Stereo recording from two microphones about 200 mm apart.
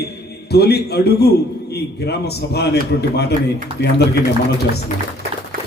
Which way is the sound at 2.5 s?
55° left (ahead or behind).